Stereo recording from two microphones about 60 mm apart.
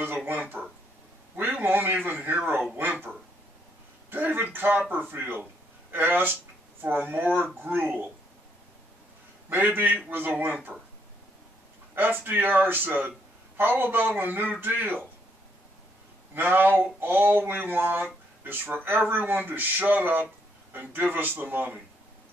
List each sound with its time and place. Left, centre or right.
0.0 s a man's voice: right
1.3 s a sound: right
2.0 s speech: right
2.7 s a sound: right
4.1 s a sound: right
6.8 s a man's voice: right
9.5 s a man's voice: right
11.9 s a man's voice: right
16.3 s a man's voice: right